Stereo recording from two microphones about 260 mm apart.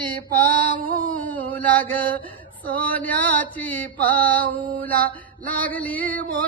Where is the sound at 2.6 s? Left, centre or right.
Centre.